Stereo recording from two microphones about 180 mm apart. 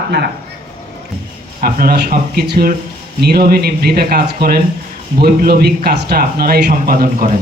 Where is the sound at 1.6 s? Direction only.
55° right (ahead or behind).